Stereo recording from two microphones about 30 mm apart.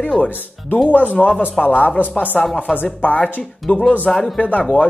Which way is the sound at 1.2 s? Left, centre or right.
Left.